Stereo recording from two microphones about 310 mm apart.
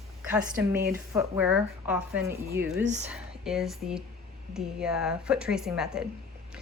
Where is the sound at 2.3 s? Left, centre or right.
Right.